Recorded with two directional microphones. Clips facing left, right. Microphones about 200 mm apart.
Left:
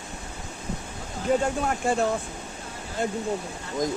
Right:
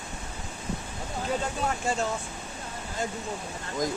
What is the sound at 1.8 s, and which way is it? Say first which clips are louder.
Speech: left 6 dB; 55° left (ahead or behind).